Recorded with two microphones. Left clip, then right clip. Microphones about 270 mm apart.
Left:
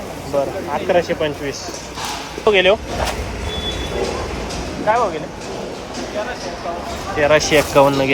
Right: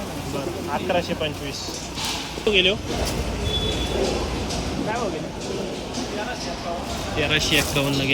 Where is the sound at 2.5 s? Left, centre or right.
Left.